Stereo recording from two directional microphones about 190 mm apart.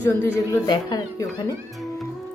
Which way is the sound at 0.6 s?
20° left (ahead or behind).